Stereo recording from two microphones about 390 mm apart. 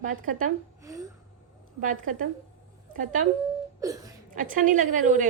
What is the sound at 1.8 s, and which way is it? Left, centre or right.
A woman's voice, centre.